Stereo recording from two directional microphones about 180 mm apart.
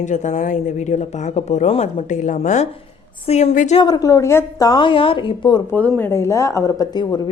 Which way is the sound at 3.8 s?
20° left (ahead or behind).